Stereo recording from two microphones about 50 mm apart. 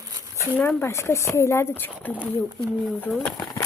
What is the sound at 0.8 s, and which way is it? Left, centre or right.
Speech, left.